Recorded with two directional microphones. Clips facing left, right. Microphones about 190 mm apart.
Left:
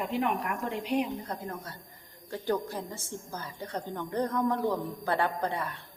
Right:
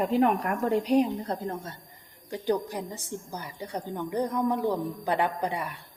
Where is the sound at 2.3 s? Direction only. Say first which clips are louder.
Right 3 dB; 15° right (ahead or behind).